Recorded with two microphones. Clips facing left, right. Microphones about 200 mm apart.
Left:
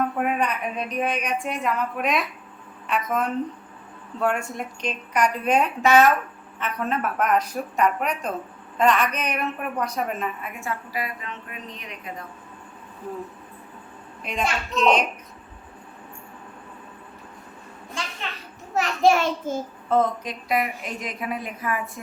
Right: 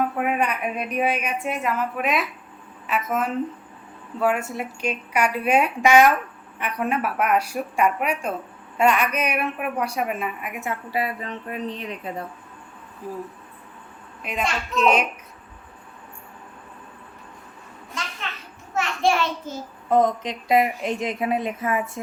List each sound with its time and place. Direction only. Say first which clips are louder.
0.0 s a woman's voice: right 1 dB; 5° right (ahead or behind); by 11.9 s 30° right (ahead or behind)
14.2 s a woman's voice: even; 5° right (ahead or behind)
18.0 s children playing: left 1 dB; 30° left (ahead or behind)
18.7 s a child's voice: left 3 dB; 35° left (ahead or behind)
19.9 s a woman's voice: right 2 dB; 20° right (ahead or behind)